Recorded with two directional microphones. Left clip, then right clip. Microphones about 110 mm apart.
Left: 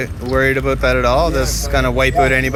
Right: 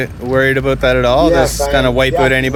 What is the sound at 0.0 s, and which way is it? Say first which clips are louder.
Speech: right 3 dB; 55° right (ahead or behind).